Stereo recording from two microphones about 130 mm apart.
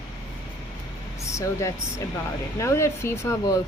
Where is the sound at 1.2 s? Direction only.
25° left (ahead or behind).